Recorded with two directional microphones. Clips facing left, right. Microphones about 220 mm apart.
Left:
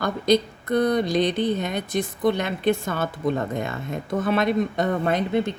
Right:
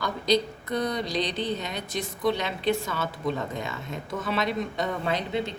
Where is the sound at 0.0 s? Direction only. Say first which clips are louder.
Left 4 dB; 55° left (ahead or behind).